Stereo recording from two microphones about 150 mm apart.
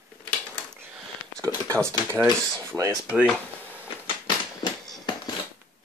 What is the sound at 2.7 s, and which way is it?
Speech, 20° right (ahead or behind).